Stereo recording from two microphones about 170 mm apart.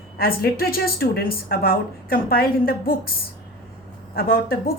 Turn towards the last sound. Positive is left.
turn(degrees=60)  # may be behind; listen again after turning